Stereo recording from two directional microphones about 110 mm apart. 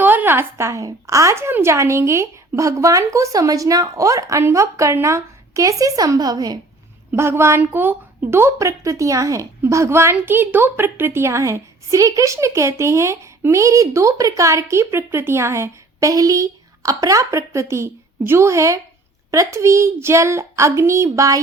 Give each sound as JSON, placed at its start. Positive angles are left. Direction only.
{"t": 0.0, "sound": "a woman's voice", "side_deg": -15}
{"t": 7.1, "sound": "a woman's voice", "side_deg": -25}